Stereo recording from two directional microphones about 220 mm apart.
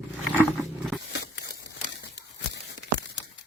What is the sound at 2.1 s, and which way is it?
Tearing, 55° left (ahead or behind).